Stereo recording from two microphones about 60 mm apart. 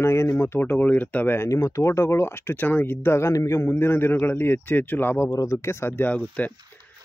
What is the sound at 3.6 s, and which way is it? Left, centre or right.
Speech, left.